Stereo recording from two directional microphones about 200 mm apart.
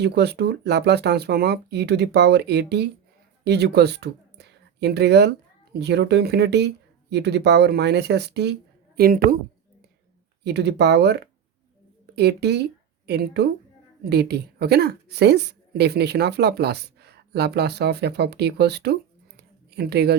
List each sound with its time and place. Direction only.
0.0 s a woman's voice: 55° right (ahead or behind)
10.4 s a woman's voice: 55° right (ahead or behind)
19.4 s a sound: 55° right (ahead or behind)